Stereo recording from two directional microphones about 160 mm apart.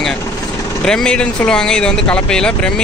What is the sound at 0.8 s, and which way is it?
Speech, 5° left (ahead or behind).